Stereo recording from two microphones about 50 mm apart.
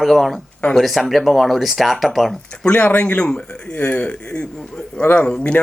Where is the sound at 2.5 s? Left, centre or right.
Left.